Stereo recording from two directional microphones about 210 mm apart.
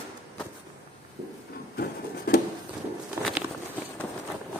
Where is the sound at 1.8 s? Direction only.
45° left (ahead or behind).